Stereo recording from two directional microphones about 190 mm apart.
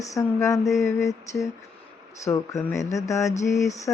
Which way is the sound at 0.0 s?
15° left (ahead or behind).